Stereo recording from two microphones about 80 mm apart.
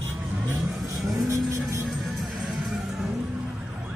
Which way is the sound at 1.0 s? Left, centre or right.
Centre.